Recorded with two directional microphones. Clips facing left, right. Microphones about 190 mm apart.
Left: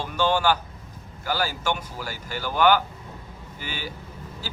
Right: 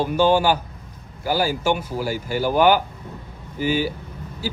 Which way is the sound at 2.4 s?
45° right (ahead or behind).